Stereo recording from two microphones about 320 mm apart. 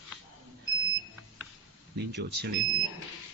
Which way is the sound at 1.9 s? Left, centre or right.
Right.